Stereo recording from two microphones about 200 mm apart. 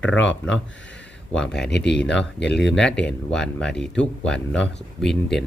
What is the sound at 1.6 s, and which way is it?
Speech, 60° left (ahead or behind).